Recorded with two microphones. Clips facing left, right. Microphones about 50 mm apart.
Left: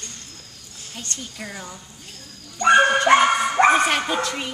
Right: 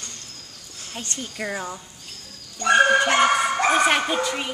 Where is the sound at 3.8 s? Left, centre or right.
Centre.